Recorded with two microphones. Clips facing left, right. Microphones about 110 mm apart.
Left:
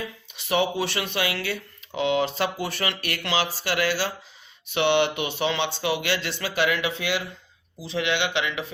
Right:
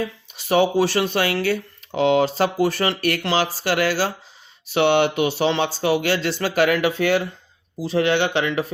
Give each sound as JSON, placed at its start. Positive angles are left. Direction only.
{"t": 0.0, "sound": "speech", "side_deg": -40}